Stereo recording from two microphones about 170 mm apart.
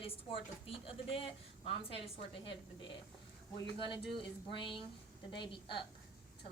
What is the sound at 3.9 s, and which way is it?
Speech, 30° left (ahead or behind).